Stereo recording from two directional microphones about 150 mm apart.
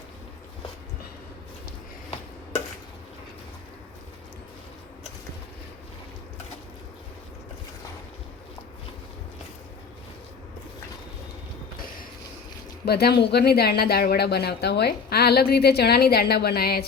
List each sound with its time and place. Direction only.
12.8 s speech: 90° left